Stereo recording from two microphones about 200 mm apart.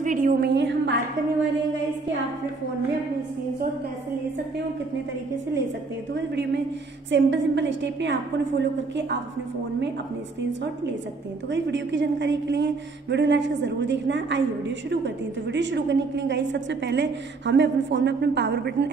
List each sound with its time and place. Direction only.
0.0 s a sound: 40° right (ahead or behind); by 0.9 s 60° right (ahead or behind)
6.1 s a woman's voice: 60° right (ahead or behind)
11.5 s a woman's voice: 65° right (ahead or behind)